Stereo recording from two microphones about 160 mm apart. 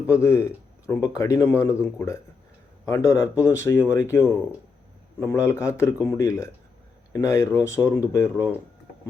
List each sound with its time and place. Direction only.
0.1 s speech: 15° left (ahead or behind)